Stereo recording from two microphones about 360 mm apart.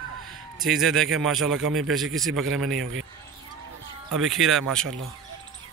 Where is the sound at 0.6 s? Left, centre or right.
Centre.